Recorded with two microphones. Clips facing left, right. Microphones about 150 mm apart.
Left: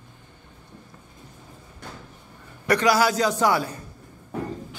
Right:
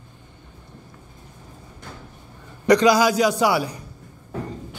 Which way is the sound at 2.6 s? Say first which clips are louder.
Right 4 dB; 15° right (ahead or behind).